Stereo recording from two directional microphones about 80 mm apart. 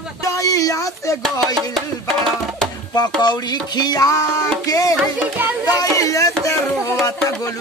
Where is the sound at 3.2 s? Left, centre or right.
Left.